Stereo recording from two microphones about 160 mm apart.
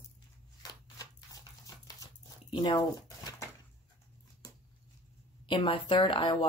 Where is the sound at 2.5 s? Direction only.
25° left (ahead or behind).